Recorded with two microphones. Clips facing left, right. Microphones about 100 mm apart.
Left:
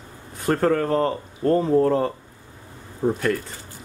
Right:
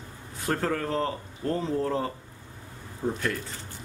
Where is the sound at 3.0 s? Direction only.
80° left.